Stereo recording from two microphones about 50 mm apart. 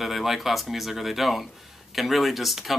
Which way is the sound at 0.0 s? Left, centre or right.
Centre.